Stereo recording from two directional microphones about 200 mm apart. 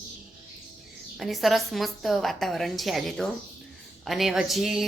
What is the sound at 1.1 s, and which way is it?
A woman's voice, centre (ahead or behind).